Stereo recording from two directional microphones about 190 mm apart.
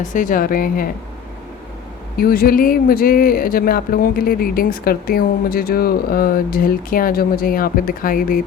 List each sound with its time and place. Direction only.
0.0 s speech: 45° left (ahead or behind)
2.1 s speech: 50° left (ahead or behind)